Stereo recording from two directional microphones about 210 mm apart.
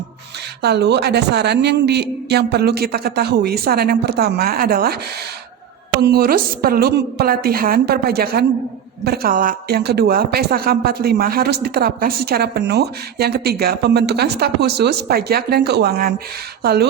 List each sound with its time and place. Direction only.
0.6 s a woman's voice: 50° right (ahead or behind)
6.0 s a woman's voice: 50° right (ahead or behind)